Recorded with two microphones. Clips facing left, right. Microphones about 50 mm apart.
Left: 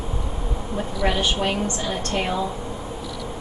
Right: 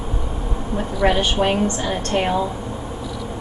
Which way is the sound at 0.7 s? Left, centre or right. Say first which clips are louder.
Right 5 dB; right.